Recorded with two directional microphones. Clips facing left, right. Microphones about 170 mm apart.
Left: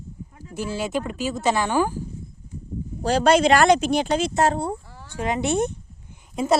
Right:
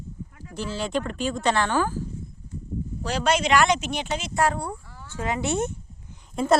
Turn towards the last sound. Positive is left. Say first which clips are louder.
# even
turn(degrees=0)  # may be behind; listen again after turning